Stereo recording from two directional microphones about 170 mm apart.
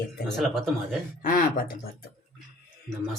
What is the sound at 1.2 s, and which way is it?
Speech, 55° left (ahead or behind).